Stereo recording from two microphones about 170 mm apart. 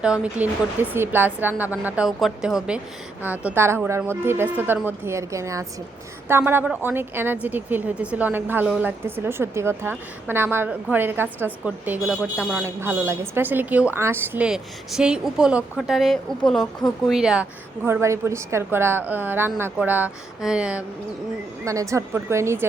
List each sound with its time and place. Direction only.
0.0 s a woman's voice: 5° right (ahead or behind)
17.8 s a woman's voice: 15° right (ahead or behind)
21.6 s a woman's voice: 20° right (ahead or behind)